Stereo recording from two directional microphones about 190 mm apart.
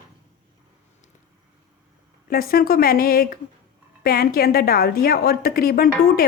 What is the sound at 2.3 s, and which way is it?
A woman's voice, 50° left (ahead or behind).